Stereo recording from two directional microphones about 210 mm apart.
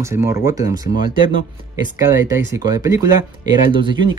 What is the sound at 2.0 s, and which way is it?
Speech, 10° right (ahead or behind).